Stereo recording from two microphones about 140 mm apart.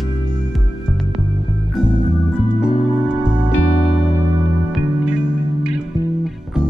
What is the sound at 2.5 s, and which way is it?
Music, 5° right (ahead or behind).